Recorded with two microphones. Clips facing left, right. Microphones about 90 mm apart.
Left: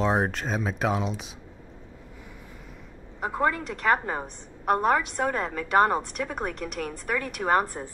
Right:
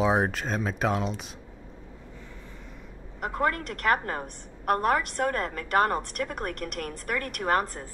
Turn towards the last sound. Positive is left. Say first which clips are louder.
# left 2 dB
turn(degrees=5)  # may be behind; listen again after turning